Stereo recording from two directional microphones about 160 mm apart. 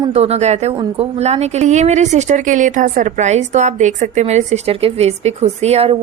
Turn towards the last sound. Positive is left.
turn(degrees=-40)  # may be behind; listen again after turning